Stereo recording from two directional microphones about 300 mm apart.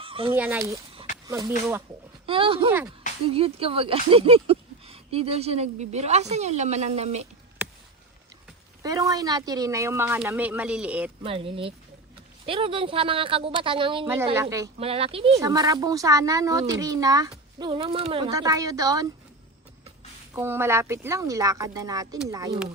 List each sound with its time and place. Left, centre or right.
0.0 s fowl: centre
0.3 s speech: centre; by 7.3 s right
8.8 s speech: centre
11.2 s speech: centre
20.3 s speech: centre